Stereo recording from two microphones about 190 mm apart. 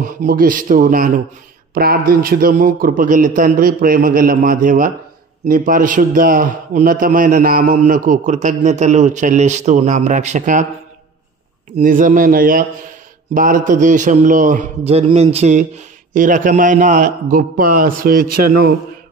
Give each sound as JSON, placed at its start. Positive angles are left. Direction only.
{"t": 0.0, "sound": "a man's voice", "side_deg": -45}
{"t": 11.8, "sound": "a man's voice", "side_deg": -45}